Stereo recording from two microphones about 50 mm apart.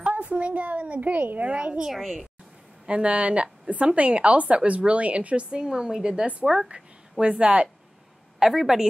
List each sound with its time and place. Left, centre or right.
0.0 s a woman's voice: right
1.9 s a woman's voice: centre
2.9 s a woman's voice: right
8.4 s a woman's voice: centre